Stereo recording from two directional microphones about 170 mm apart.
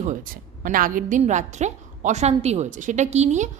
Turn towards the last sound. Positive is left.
turn(degrees=-45)  # may be behind; listen again after turning